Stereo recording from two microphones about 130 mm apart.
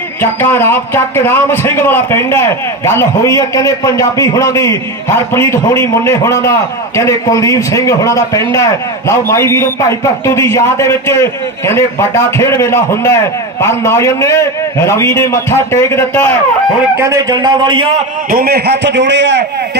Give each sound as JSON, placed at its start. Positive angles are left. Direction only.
{"t": 0.2, "sound": "a man's voice", "side_deg": 15}
{"t": 16.9, "sound": "a man's voice", "side_deg": -25}